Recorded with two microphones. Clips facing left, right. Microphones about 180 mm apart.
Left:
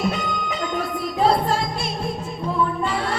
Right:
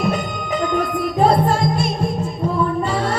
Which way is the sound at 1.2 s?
45° right (ahead or behind).